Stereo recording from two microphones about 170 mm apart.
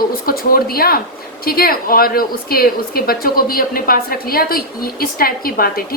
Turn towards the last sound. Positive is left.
turn(degrees=60)  # may be behind; listen again after turning